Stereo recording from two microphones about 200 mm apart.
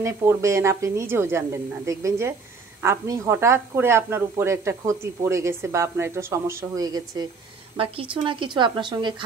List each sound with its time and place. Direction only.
0.0 s a woman's voice: 15° right (ahead or behind)